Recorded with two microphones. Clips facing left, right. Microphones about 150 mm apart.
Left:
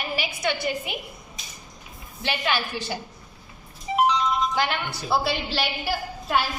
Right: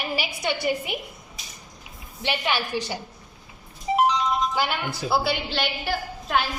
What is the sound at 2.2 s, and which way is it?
Speech, 15° right (ahead or behind).